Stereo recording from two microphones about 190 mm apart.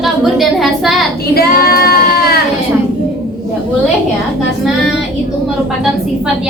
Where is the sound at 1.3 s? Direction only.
55° left (ahead or behind).